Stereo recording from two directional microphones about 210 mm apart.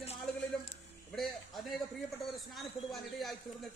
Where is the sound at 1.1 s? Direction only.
Centre (ahead or behind).